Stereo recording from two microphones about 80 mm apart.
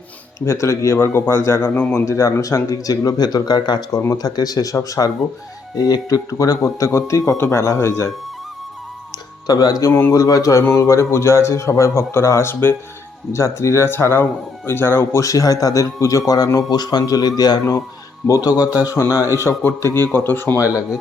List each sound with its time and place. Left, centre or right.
0.3 s a man's voice: left
2.0 s a man's voice: left
9.5 s a man's voice: left
19.5 s a man's voice: left